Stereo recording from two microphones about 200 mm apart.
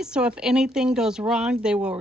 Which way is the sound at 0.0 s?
5° right (ahead or behind).